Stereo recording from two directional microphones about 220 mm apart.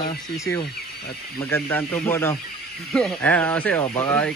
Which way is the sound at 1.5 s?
10° left (ahead or behind).